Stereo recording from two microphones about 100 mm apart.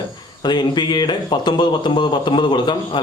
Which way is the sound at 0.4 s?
50° left (ahead or behind).